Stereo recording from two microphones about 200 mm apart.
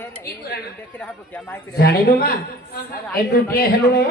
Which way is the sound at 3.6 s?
50° left (ahead or behind).